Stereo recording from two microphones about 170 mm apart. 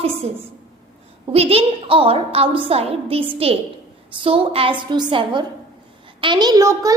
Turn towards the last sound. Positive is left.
turn(degrees=-20)  # may be behind; listen again after turning